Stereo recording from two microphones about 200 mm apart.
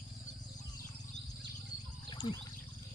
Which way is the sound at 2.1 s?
25° left (ahead or behind).